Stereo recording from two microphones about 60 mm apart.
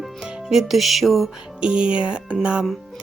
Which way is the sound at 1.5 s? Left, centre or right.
Centre.